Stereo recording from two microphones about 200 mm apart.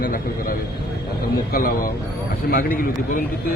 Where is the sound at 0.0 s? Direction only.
45° left (ahead or behind).